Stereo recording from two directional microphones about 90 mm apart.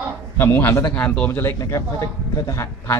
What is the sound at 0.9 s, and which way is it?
Speech, 15° left (ahead or behind).